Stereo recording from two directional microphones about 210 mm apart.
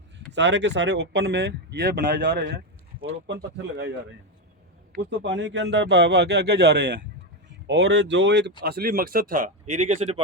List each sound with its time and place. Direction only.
0.3 s speech: 55° right (ahead or behind)
5.2 s speech: 55° right (ahead or behind); by 10.2 s 30° right (ahead or behind)